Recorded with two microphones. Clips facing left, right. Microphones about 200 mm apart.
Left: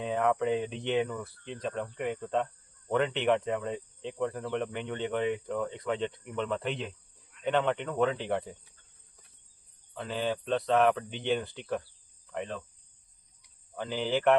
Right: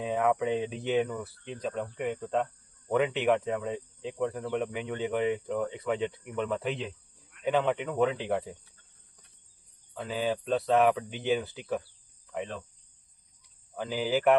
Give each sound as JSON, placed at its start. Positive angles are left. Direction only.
{"t": 0.0, "sound": "speech", "side_deg": -5}
{"t": 9.9, "sound": "speech", "side_deg": -5}
{"t": 13.7, "sound": "speech", "side_deg": -5}